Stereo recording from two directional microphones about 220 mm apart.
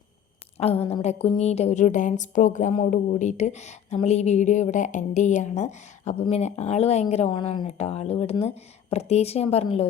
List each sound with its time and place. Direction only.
0.9 s speech: 25° left (ahead or behind)